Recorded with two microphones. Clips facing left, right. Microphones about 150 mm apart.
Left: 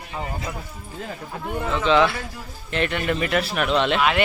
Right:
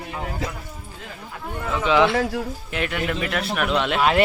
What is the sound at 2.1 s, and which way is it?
Speech, 80° right.